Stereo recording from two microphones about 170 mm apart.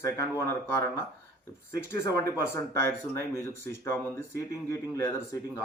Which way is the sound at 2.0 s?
15° left (ahead or behind).